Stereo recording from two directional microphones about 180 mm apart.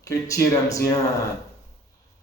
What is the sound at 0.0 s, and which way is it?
Speech, 15° left (ahead or behind).